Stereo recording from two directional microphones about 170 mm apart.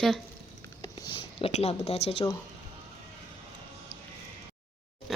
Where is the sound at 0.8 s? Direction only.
25° left (ahead or behind).